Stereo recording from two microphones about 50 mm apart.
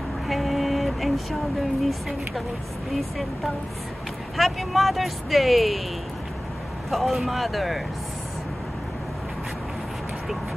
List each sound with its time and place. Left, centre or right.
0.3 s vehicle: centre
2.9 s speech: centre
6.9 s speech: centre